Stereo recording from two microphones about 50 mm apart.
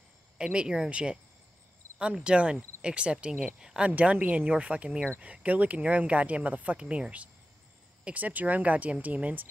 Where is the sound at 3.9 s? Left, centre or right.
Right.